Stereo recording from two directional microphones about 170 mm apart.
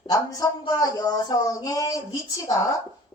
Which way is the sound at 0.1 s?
20° left (ahead or behind).